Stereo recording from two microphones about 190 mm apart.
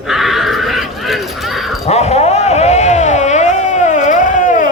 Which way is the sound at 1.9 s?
35° left (ahead or behind).